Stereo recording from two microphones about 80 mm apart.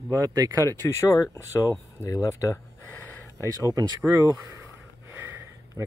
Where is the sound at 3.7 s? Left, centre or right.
Right.